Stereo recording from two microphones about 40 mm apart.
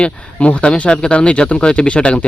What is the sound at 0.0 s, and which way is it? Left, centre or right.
Speech, left.